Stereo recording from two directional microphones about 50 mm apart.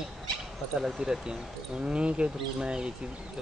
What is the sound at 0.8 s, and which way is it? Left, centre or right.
Speech, centre.